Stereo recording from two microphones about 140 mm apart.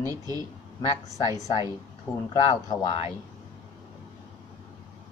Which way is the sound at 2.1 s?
25° left (ahead or behind).